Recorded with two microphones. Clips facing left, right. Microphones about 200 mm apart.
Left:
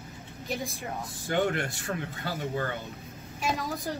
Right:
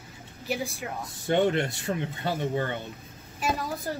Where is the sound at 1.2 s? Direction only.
25° right (ahead or behind).